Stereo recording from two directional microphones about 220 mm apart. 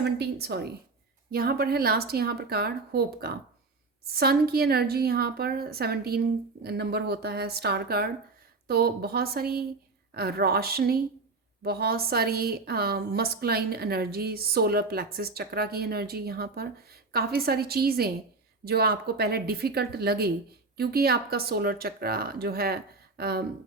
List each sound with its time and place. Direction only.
0.0 s a woman's voice: 45° right (ahead or behind)